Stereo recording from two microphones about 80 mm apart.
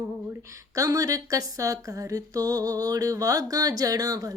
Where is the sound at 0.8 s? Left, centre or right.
Right.